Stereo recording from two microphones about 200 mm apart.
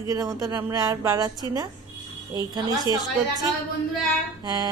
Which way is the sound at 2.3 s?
20° right (ahead or behind).